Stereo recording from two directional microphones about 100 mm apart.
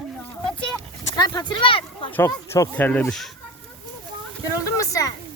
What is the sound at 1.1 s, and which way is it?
Speech, 45° left (ahead or behind).